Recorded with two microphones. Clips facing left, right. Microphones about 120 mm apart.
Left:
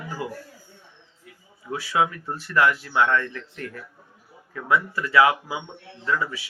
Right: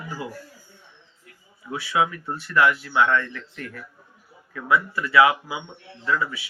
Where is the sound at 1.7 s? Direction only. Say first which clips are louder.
Even; 40° left (ahead or behind).